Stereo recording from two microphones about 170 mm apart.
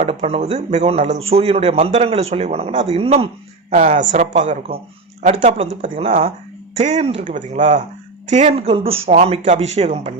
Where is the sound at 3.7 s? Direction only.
50° right (ahead or behind).